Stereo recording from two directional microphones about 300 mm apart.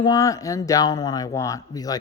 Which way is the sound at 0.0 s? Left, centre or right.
Centre.